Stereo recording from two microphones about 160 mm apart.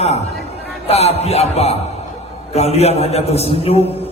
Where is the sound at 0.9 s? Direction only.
40° left (ahead or behind).